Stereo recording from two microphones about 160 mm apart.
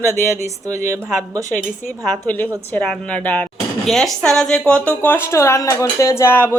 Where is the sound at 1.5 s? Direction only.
15° left (ahead or behind).